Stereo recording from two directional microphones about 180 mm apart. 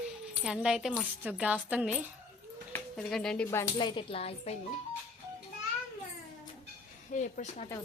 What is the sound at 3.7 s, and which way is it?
Speech, 25° left (ahead or behind).